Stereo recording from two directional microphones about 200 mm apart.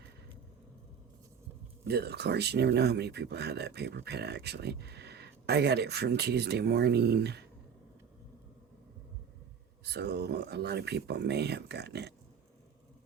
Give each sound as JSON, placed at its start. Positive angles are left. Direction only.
{"t": 1.9, "sound": "speech", "side_deg": -55}
{"t": 9.8, "sound": "speech", "side_deg": -55}